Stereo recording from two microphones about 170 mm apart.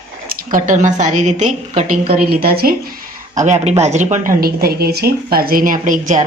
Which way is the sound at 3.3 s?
45° right (ahead or behind).